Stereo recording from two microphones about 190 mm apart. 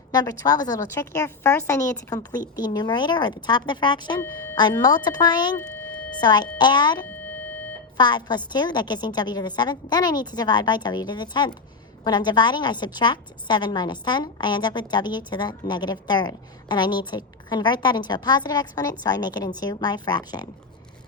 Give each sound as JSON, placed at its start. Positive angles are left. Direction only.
{"t": 0.1, "sound": "a woman's voice", "side_deg": 20}